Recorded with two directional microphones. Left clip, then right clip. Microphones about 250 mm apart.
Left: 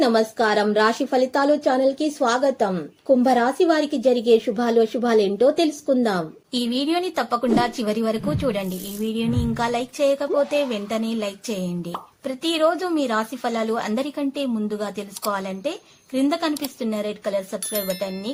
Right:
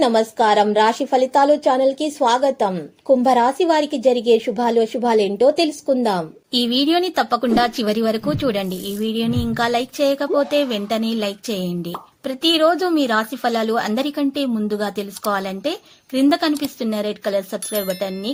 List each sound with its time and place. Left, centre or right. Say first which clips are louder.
0.0 s a woman's voice: right 3 dB; centre